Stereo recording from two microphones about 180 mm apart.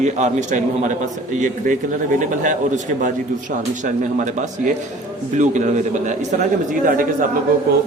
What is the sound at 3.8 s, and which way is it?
Speech, 45° right (ahead or behind).